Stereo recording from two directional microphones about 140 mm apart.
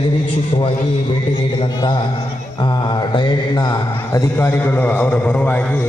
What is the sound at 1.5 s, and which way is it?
A man's voice, 30° left (ahead or behind).